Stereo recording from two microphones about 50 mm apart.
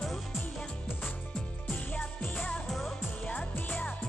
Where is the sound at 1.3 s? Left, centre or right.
Left.